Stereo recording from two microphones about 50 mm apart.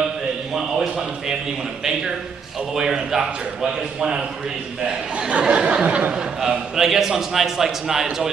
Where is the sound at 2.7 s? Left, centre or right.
Centre.